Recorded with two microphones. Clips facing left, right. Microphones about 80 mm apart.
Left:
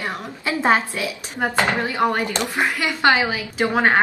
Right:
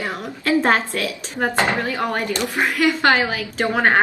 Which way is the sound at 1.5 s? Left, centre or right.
Right.